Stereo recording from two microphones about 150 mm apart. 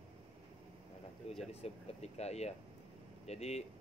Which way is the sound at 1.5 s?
45° left (ahead or behind).